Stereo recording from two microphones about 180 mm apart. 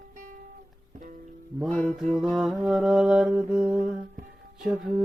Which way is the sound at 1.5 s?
Centre (ahead or behind).